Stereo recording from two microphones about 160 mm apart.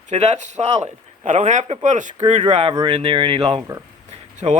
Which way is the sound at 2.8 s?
35° right (ahead or behind).